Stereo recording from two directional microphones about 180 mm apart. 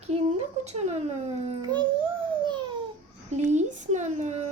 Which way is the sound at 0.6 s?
35° right (ahead or behind).